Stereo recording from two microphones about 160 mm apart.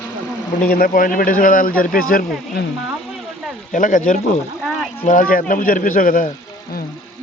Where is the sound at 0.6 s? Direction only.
60° left (ahead or behind).